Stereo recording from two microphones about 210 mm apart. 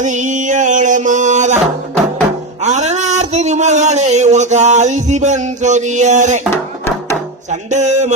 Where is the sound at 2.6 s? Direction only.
35° right (ahead or behind).